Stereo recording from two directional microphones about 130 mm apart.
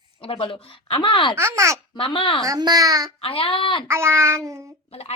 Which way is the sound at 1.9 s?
45° left (ahead or behind).